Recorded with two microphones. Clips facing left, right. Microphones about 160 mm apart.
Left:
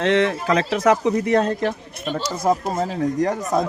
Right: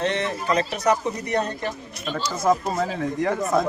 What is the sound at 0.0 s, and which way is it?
Speech, 90° left.